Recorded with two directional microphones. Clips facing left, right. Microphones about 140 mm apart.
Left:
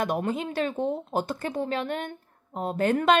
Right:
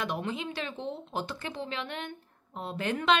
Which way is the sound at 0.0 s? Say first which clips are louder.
Left 6 dB; 45° left (ahead or behind).